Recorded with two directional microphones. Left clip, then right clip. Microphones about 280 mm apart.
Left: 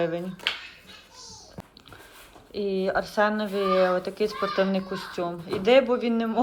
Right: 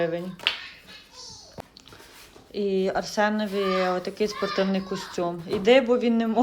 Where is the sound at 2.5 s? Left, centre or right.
Centre.